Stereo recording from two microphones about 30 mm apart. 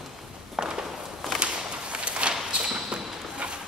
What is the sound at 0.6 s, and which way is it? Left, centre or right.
Walk, centre.